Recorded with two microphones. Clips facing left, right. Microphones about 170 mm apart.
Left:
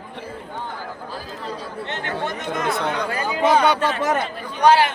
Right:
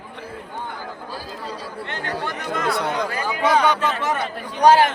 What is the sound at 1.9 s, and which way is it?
Speech, 25° left (ahead or behind).